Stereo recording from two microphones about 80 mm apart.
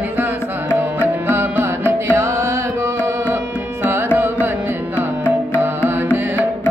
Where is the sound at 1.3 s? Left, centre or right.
Right.